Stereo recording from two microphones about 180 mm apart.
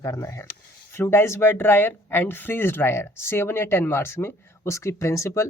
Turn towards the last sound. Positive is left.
turn(degrees=15)  # may be behind; listen again after turning